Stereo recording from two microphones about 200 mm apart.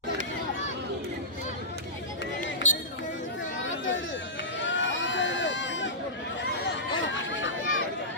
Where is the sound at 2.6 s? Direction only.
40° left (ahead or behind).